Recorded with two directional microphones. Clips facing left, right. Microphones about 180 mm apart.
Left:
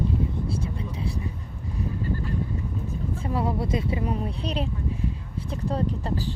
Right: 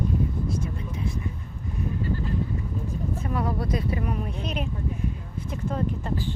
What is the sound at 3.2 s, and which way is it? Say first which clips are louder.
Speech: left 2 dB; 30° left (ahead or behind).